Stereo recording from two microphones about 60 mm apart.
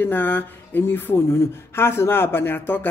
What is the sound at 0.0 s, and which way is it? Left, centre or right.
A man's voice, left.